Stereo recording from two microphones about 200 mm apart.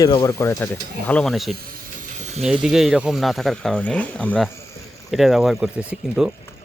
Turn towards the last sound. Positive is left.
turn(degrees=-5)  # may be behind; listen again after turning